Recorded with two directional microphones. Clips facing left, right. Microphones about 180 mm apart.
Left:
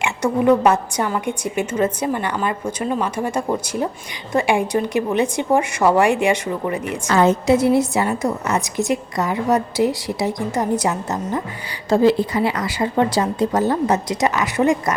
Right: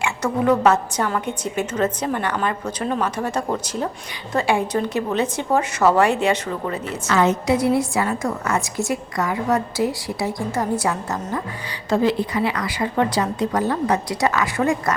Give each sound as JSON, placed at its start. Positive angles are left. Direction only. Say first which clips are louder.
{"t": 0.0, "sound": "a woman's voice", "louder": "left 3 dB", "side_deg": 15}
{"t": 7.1, "sound": "a woman's voice", "louder": "left 3 dB", "side_deg": 30}
{"t": 11.9, "sound": "a woman's voice", "louder": "left 4 dB", "side_deg": 35}